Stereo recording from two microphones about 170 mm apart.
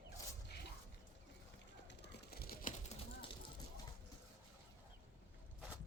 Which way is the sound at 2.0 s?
65° left (ahead or behind).